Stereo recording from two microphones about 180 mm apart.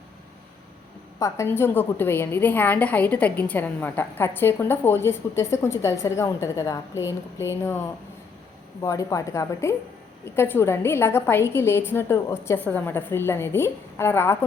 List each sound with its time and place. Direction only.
1.2 s a woman's voice: 15° left (ahead or behind)
8.8 s a woman's voice: 20° left (ahead or behind)